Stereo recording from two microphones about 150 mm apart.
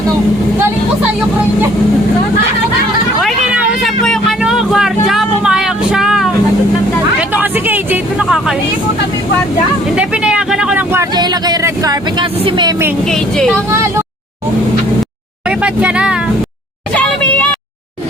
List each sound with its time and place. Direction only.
3.2 s vehicle: 5° right (ahead or behind)
9.9 s vehicle: 5° right (ahead or behind)
11.1 s a sound: 30° right (ahead or behind)
12.2 s speech: 35° right (ahead or behind)
13.1 s speech: 5° left (ahead or behind)
15.4 s speech: 5° right (ahead or behind)
16.9 s a sound: 10° left (ahead or behind)